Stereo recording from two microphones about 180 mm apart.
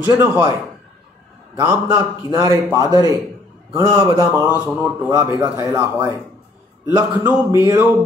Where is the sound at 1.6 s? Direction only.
15° right (ahead or behind).